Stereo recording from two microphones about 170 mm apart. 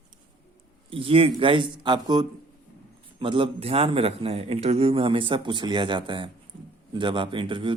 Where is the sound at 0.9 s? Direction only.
30° right (ahead or behind).